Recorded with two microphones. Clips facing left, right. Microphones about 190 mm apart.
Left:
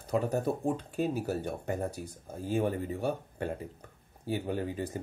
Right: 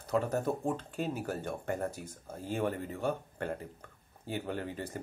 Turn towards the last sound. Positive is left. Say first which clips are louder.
# left 4 dB
turn(degrees=10)  # may be behind; listen again after turning